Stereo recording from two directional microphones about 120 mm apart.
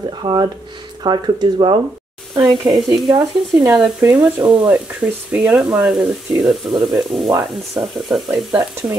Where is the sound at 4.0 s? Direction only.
15° right (ahead or behind).